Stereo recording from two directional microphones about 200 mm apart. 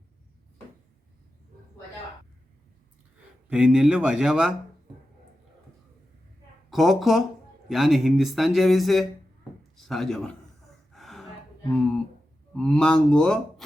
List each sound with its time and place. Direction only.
3.5 s speech: 5° right (ahead or behind)
6.7 s speech: centre (ahead or behind)
10.9 s gasp: centre (ahead or behind)
12.5 s speech: 5° left (ahead or behind)